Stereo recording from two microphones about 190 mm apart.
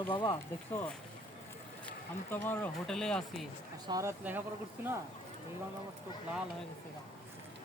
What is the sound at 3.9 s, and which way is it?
Speech, 15° right (ahead or behind).